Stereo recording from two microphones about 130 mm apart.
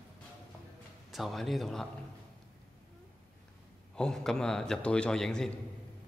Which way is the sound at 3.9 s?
5° left (ahead or behind).